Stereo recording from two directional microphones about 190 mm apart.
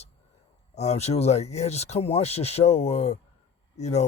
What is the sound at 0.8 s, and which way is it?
Speech, 35° left (ahead or behind).